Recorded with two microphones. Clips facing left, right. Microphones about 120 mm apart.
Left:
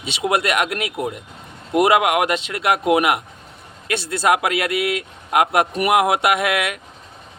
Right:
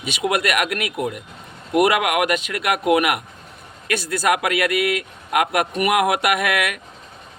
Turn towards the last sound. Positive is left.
turn(degrees=25)  # may be behind; listen again after turning